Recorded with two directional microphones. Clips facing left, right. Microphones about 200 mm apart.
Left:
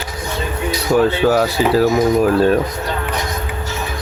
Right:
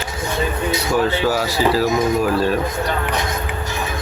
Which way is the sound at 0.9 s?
55° left (ahead or behind).